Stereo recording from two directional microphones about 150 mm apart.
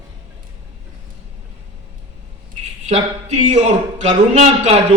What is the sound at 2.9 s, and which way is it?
A man's voice, 50° right (ahead or behind).